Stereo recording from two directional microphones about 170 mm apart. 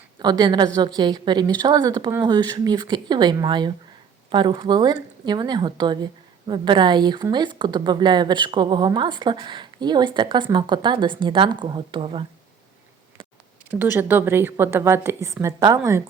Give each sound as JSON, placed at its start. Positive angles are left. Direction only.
{"t": 0.2, "sound": "a woman's voice", "side_deg": -25}
{"t": 13.7, "sound": "a woman's voice", "side_deg": -10}